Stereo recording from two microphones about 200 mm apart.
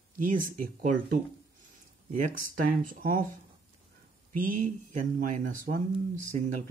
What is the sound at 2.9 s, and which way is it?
Speech, 45° right (ahead or behind).